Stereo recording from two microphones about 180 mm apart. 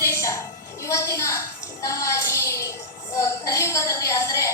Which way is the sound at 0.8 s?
15° left (ahead or behind).